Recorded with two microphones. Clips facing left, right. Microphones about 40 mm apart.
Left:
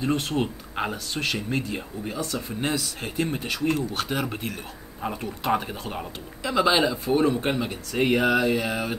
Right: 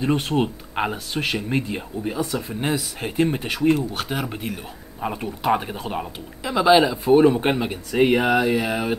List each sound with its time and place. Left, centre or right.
0.0 s speech: centre
3.7 s speech: centre
7.1 s speech: right